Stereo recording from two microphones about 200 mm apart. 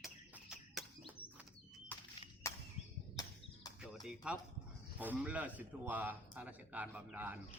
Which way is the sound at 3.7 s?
20° left (ahead or behind).